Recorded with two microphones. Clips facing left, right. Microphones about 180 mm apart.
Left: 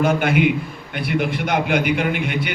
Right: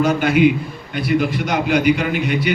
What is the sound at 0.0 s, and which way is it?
A man's voice, 55° left (ahead or behind).